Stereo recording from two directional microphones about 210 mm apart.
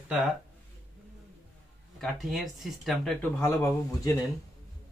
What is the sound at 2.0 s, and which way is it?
Speech, centre (ahead or behind).